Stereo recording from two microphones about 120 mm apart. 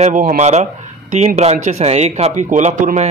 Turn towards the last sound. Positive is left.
turn(degrees=-70)  # may be behind; listen again after turning